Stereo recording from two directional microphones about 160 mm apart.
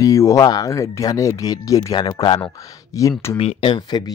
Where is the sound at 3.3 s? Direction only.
35° left (ahead or behind).